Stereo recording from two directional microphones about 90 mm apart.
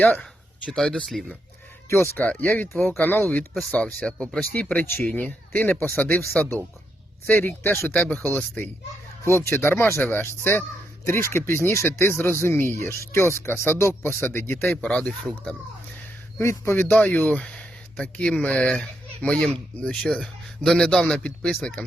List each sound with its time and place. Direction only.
0.0 s a sound: 15° left (ahead or behind)
0.7 s speech: 10° left (ahead or behind)
1.9 s speech: 30° left (ahead or behind)
2.2 s speech: 15° left (ahead or behind)
4.5 s speech: 20° left (ahead or behind)
9.2 s speech: 30° left (ahead or behind)
14.8 s speech: 15° left (ahead or behind)
16.4 s a man's voice: 30° left (ahead or behind); by 21.7 s 10° left (ahead or behind)